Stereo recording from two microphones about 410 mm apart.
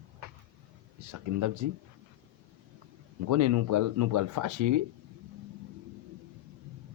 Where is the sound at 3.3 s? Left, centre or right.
Right.